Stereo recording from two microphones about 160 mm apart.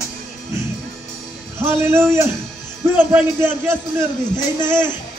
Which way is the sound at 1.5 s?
15° right (ahead or behind).